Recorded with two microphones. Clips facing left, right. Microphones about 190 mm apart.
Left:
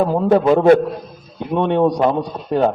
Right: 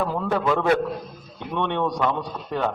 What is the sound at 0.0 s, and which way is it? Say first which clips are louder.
A man's voice: left 9 dB; 40° left (ahead or behind).